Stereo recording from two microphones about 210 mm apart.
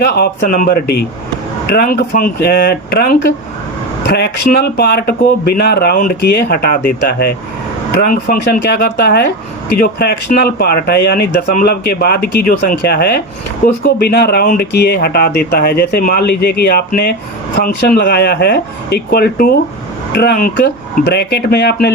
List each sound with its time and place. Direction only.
0.0 s speech: 50° left (ahead or behind)